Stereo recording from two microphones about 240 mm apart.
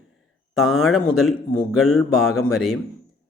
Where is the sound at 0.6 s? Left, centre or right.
Centre.